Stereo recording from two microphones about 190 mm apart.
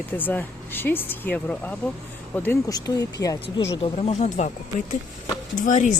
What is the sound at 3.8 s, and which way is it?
Speech, 30° left (ahead or behind).